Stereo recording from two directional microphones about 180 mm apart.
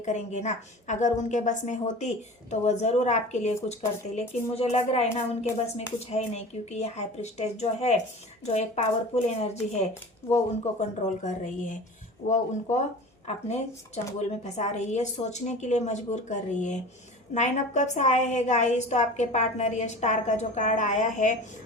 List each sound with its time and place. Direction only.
0.0 s a woman's voice: 40° left (ahead or behind)